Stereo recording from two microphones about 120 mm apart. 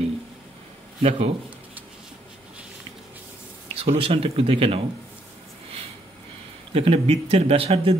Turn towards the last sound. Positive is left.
turn(degrees=-50)  # may be behind; listen again after turning